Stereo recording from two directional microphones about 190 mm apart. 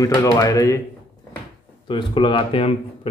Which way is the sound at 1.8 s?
25° left (ahead or behind).